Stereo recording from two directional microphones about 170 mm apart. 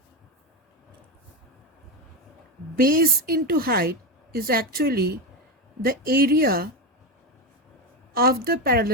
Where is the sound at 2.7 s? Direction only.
60° right (ahead or behind).